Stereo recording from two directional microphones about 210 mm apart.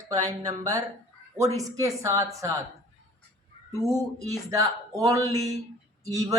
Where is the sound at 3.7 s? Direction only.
15° right (ahead or behind).